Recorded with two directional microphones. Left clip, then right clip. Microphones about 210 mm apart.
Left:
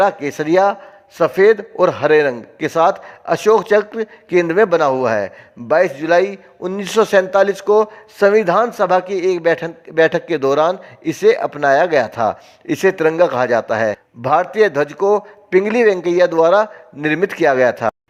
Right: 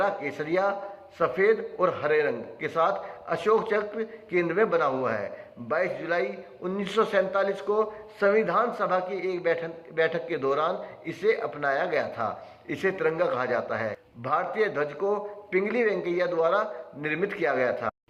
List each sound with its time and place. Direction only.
0.0 s a man's voice: 50° left (ahead or behind)